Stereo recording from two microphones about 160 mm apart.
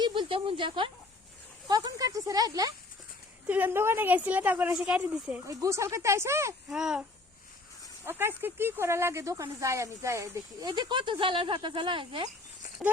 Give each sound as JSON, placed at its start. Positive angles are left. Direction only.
{"t": 0.0, "sound": "a sound", "side_deg": -30}
{"t": 1.6, "sound": "speech", "side_deg": -25}
{"t": 3.4, "sound": "a woman's voice", "side_deg": -10}
{"t": 5.5, "sound": "a woman's voice", "side_deg": -20}
{"t": 6.7, "sound": "a sound", "side_deg": -5}
{"t": 8.0, "sound": "speech", "side_deg": -15}